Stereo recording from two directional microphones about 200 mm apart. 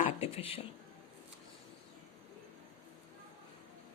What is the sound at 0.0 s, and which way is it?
Speech, 30° left (ahead or behind).